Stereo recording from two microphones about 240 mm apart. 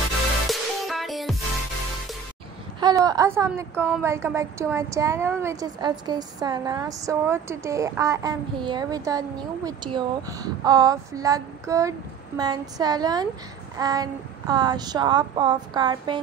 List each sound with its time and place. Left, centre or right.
0.5 s music: centre
2.8 s a woman's voice: centre